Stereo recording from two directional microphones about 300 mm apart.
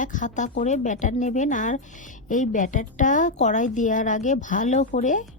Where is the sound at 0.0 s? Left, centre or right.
Left.